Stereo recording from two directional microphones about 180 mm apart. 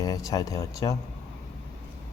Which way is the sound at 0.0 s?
20° left (ahead or behind).